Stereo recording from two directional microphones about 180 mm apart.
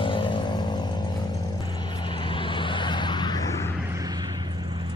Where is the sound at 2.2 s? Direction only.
25° left (ahead or behind).